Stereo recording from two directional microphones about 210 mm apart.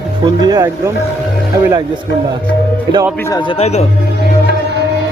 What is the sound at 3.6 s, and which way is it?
Speech, 30° left (ahead or behind).